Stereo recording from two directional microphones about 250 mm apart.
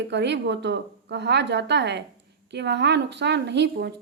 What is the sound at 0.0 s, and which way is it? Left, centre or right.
A woman's voice, right.